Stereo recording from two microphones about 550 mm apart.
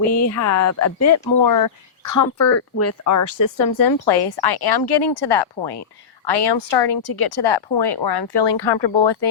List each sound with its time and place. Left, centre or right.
0.2 s speech: left